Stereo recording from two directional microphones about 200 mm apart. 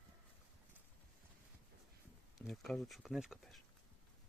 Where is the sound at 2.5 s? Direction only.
Centre (ahead or behind).